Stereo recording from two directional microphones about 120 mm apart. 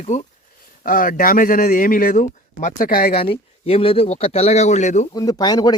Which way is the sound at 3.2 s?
50° left (ahead or behind).